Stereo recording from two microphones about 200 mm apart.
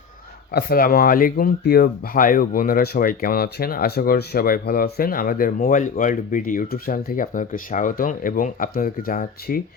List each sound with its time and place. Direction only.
0.5 s speech: 50° left (ahead or behind)